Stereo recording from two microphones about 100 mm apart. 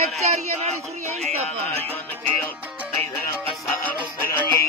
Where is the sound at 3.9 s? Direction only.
20° left (ahead or behind).